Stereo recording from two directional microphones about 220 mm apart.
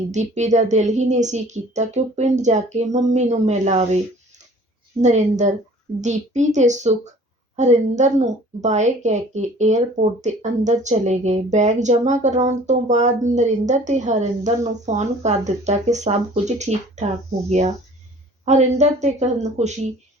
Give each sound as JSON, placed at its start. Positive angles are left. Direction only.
{"t": 0.1, "sound": "a woman's voice", "side_deg": -30}